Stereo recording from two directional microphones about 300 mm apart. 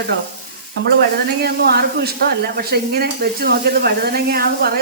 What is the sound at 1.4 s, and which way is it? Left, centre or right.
Sizzle, right.